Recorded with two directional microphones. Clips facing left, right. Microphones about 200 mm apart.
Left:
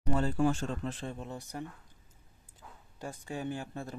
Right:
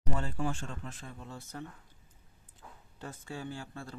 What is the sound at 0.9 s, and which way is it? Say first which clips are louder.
Speech: left 7 dB; 30° left (ahead or behind).